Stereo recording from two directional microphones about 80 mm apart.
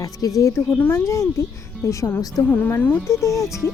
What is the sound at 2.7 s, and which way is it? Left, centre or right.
Speech, left.